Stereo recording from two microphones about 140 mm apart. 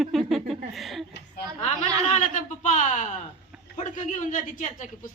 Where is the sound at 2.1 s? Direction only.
60° left (ahead or behind).